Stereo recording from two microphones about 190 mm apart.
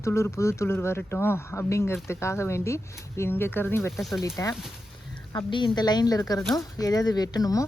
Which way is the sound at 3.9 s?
Centre (ahead or behind).